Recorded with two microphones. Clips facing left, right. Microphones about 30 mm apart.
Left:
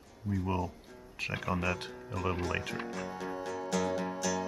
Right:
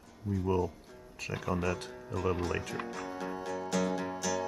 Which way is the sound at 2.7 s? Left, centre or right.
Centre.